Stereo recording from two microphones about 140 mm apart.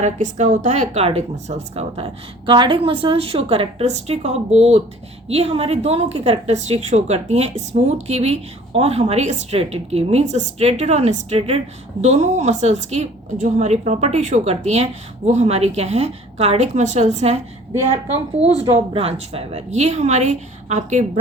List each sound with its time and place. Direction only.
0.0 s a woman's voice: 60° right (ahead or behind)
18.3 s a woman's voice: 50° right (ahead or behind)